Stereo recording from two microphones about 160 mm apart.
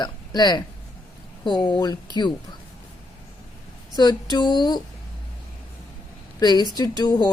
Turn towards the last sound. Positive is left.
turn(degrees=25)  # may be behind; listen again after turning